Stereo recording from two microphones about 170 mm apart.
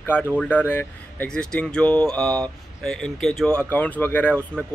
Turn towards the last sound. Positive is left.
turn(degrees=10)  # may be behind; listen again after turning